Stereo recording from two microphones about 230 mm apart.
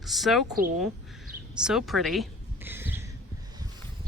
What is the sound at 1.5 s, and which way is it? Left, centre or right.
Speech, centre.